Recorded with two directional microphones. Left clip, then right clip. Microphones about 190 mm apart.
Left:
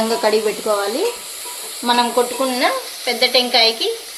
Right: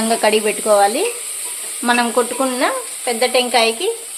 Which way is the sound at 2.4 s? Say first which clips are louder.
Even; 35° right (ahead or behind).